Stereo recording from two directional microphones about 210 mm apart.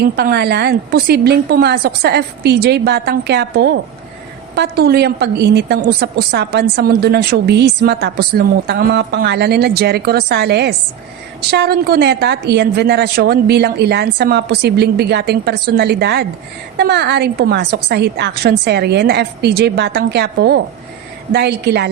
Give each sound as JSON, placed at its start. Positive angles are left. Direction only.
{"t": 0.0, "sound": "a woman's voice", "side_deg": -50}